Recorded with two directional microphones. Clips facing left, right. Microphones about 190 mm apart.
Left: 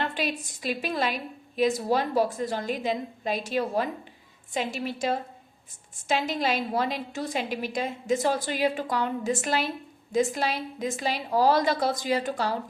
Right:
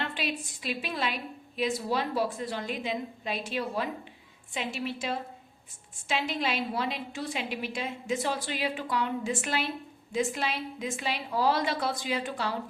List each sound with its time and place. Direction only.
0.0 s a woman's voice: 45° left (ahead or behind)